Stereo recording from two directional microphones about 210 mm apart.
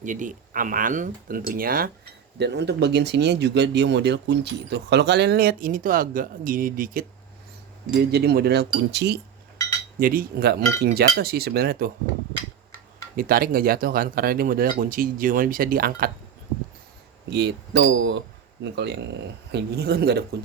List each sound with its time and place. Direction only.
0.0 s speech: 40° right (ahead or behind)
2.4 s speech: 55° right (ahead or behind)
8.1 s speech: 50° right (ahead or behind)
13.1 s speech: 45° right (ahead or behind)
17.2 s speech: 55° right (ahead or behind)